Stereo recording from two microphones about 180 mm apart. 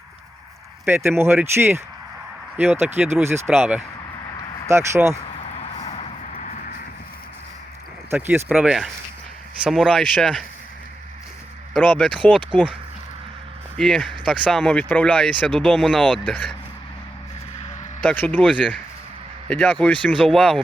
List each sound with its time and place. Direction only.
0.9 s speech: 15° right (ahead or behind)
5.8 s a sound: 35° left (ahead or behind)
6.3 s horse: 50° left (ahead or behind)
8.1 s speech: 10° right (ahead or behind); by 10.4 s 5° left (ahead or behind)
11.8 s speech: 5° left (ahead or behind)
13.7 s speech: 5° left (ahead or behind)
18.0 s speech: 10° left (ahead or behind)